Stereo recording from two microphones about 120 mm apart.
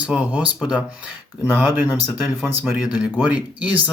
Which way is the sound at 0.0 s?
10° right (ahead or behind).